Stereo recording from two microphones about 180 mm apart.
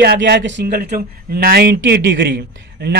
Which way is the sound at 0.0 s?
65° right (ahead or behind).